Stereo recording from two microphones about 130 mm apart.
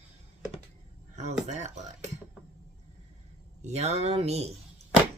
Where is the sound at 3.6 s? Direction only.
60° right (ahead or behind).